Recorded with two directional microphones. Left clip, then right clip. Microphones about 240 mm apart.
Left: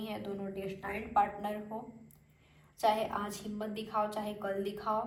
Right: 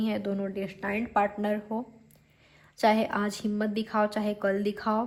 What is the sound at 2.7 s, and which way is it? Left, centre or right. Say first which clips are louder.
A woman's voice: right 6 dB; right.